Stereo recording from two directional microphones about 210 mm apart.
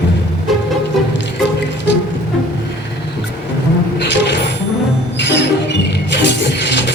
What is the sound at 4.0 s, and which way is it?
Music, 55° left (ahead or behind).